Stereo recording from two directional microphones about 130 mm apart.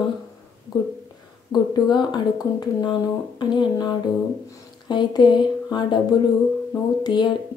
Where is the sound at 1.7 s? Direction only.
35° left (ahead or behind).